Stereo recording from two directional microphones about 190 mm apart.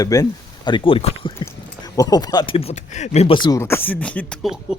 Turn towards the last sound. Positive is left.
turn(degrees=0)  # may be behind; listen again after turning